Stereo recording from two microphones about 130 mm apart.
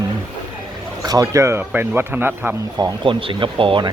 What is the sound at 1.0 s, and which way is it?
Speech, 30° right (ahead or behind).